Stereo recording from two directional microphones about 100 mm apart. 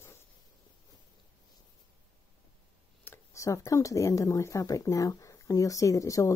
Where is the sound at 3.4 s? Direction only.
35° left (ahead or behind).